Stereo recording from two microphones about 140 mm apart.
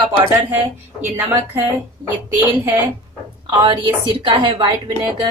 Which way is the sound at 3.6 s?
40° right (ahead or behind).